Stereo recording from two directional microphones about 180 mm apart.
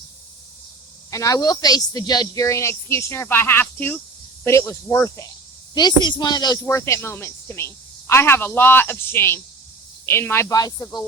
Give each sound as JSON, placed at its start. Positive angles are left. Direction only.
{"t": 1.1, "sound": "speech", "side_deg": 20}